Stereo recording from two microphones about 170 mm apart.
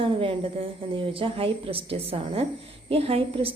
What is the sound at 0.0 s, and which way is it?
Speech, 30° right (ahead or behind).